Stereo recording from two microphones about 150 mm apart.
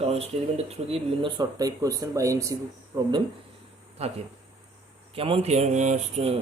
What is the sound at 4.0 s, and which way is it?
Speech, 45° right (ahead or behind).